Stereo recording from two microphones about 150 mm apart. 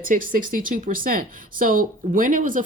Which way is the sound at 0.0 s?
65° right (ahead or behind).